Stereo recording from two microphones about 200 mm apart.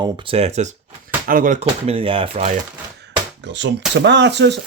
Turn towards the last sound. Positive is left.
turn(degrees=-60)  # may be behind; listen again after turning